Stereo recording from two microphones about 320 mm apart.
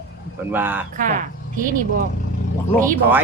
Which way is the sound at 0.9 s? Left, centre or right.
Right.